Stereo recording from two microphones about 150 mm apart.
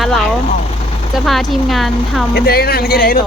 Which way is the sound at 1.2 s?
Centre (ahead or behind).